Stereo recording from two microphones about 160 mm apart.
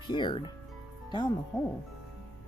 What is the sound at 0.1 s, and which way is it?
Speech, 30° left (ahead or behind).